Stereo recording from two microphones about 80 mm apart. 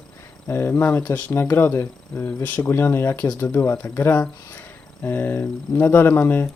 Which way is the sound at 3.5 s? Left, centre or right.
Left.